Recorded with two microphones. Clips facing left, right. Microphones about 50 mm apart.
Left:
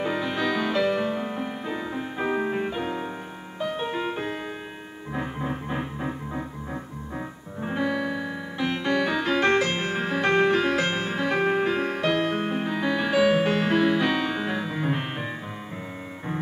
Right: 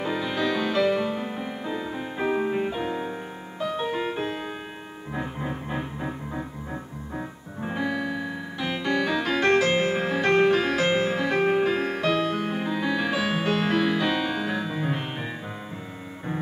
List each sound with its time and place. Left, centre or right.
0.0 s music: centre
3.5 s music: centre
5.1 s organ: centre
8.9 s music: centre
9.7 s music: centre
9.9 s music: centre
12.2 s music: left
12.8 s music: centre
13.4 s music: centre